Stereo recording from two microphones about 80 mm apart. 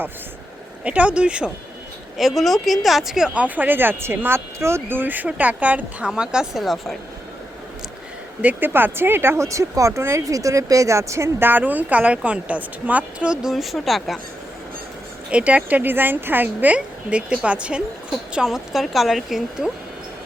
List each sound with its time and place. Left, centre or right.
0.9 s a woman's voice: centre
2.1 s speech: centre
8.4 s speech: right; by 14.2 s centre
15.3 s a woman's voice: centre